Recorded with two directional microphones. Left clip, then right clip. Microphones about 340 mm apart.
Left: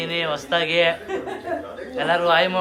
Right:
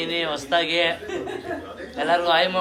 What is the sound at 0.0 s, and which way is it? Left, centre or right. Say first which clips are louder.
Speech: left 1 dB; centre.